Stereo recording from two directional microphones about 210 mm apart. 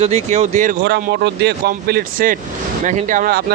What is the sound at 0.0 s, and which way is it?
Speech, 30° right (ahead or behind).